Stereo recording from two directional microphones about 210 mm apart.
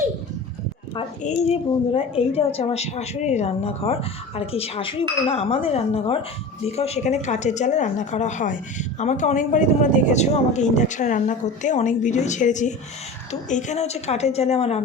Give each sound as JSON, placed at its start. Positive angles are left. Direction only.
{"t": 1.2, "sound": "a woman's voice", "side_deg": 25}